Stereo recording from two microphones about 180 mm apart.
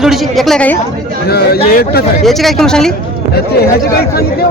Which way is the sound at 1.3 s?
60° left (ahead or behind).